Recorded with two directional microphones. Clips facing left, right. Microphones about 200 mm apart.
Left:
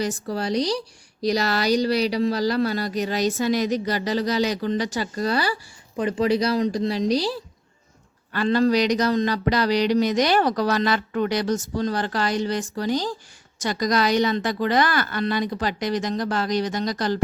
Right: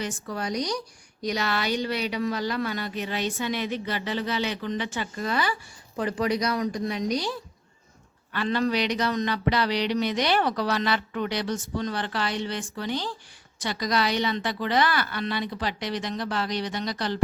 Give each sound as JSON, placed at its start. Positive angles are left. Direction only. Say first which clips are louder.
{"t": 0.0, "sound": "speech", "louder": "left 5 dB", "side_deg": 35}
{"t": 6.0, "sound": "a woman's voice", "louder": "left 5 dB", "side_deg": 25}